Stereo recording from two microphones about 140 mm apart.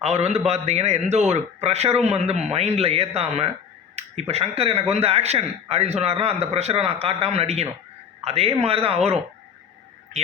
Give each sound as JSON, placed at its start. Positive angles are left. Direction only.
{"t": 0.0, "sound": "a man's voice", "side_deg": -50}